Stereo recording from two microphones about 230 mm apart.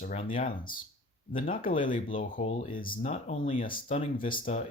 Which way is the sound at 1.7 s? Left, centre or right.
Left.